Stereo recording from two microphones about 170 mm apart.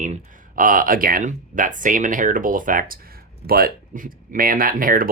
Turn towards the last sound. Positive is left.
turn(degrees=-55)  # may be behind; listen again after turning